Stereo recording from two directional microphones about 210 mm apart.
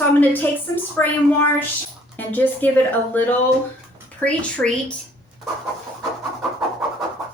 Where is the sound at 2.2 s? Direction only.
10° left (ahead or behind).